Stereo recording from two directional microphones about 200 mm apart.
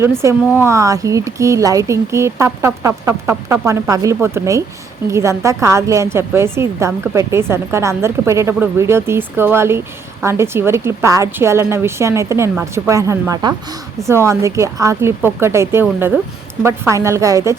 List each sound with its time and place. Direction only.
0.2 s a woman's voice: 10° right (ahead or behind)